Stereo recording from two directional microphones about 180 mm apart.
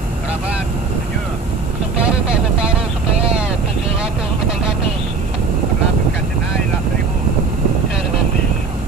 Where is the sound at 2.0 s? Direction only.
5° right (ahead or behind).